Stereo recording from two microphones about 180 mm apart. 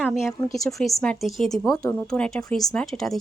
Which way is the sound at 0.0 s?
Centre (ahead or behind).